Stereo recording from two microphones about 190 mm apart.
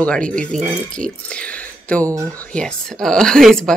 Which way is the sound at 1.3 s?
5° left (ahead or behind).